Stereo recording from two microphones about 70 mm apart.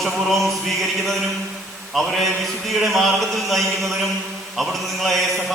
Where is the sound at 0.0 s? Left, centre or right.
Centre.